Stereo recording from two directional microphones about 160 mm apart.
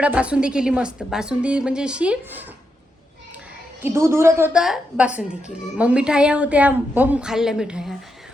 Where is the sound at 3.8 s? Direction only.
15° right (ahead or behind).